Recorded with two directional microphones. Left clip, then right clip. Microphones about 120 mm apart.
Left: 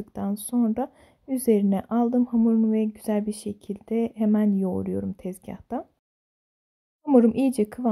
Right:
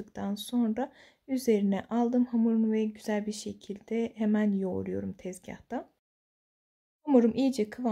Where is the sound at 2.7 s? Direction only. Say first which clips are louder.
Left 5 dB; 45° left (ahead or behind).